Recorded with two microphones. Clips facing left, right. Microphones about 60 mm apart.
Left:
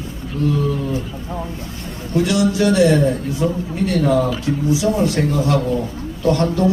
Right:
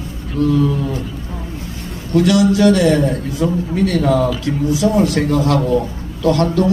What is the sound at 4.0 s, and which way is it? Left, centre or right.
A man's voice, right.